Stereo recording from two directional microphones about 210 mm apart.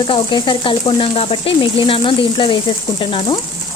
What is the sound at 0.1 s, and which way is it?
Speech, 20° left (ahead or behind).